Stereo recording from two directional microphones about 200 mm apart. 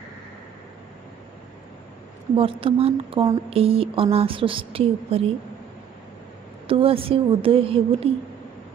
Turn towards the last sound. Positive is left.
turn(degrees=-25)  # may be behind; listen again after turning